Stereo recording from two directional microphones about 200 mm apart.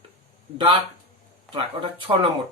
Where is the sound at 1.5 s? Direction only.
25° right (ahead or behind).